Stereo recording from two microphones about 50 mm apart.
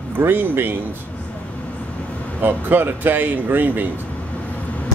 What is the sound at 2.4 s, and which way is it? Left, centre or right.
Speech, right.